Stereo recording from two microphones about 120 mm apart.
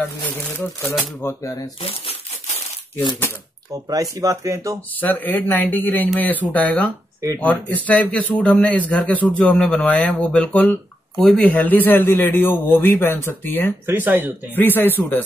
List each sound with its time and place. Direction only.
1.2 s speech: 30° left (ahead or behind)
1.8 s crumpling: 55° left (ahead or behind)
3.7 s speech: 30° right (ahead or behind)
5.0 s a man's voice: 15° left (ahead or behind)
13.8 s speech: 15° right (ahead or behind)
14.5 s a man's voice: 15° left (ahead or behind)